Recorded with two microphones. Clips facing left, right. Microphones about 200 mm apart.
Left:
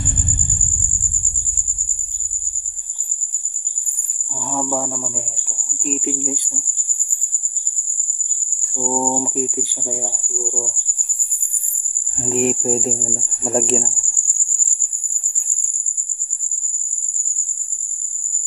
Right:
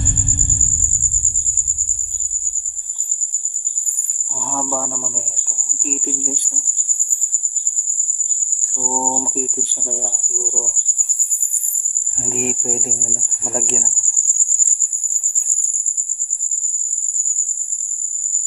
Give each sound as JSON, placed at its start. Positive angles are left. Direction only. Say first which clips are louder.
{"t": 4.5, "sound": "a sound", "louder": "left 2 dB", "side_deg": 10}
{"t": 8.7, "sound": "cricket", "louder": "left 3 dB", "side_deg": 20}
{"t": 12.3, "sound": "speech", "louder": "left 5 dB", "side_deg": 35}